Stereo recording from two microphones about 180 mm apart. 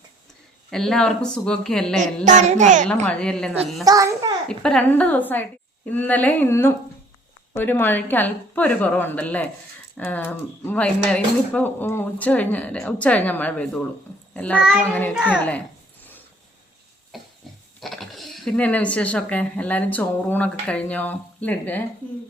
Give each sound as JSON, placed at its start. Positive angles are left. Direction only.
{"t": 0.7, "sound": "a woman's voice", "side_deg": 5}
{"t": 2.2, "sound": "speech", "side_deg": -45}
{"t": 2.8, "sound": "a woman's voice", "side_deg": 5}
{"t": 3.8, "sound": "a child's voice", "side_deg": -20}
{"t": 4.4, "sound": "speech", "side_deg": 5}
{"t": 15.1, "sound": "a woman's voice", "side_deg": -5}
{"t": 17.1, "sound": "a sound", "side_deg": 0}
{"t": 17.7, "sound": "speech", "side_deg": 0}